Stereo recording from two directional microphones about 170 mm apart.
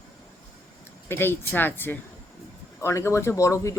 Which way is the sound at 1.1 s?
15° left (ahead or behind).